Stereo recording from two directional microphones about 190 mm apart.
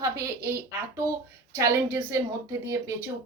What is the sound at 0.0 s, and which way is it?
Speech, 15° right (ahead or behind).